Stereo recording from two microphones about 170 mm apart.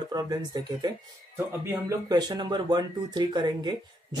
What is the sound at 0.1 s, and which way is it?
Speech, 20° right (ahead or behind).